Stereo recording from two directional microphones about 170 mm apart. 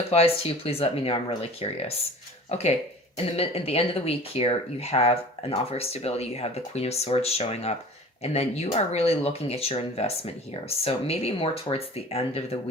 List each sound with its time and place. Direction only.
0.1 s speech: 40° left (ahead or behind)